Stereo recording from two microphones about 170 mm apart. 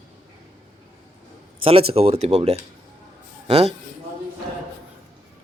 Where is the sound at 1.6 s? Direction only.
35° right (ahead or behind).